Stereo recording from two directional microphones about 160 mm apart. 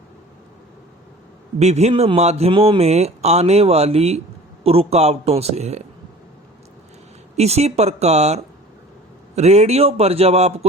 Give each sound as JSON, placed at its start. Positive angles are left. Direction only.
{"t": 1.5, "sound": "speech", "side_deg": -45}
{"t": 7.3, "sound": "speech", "side_deg": -40}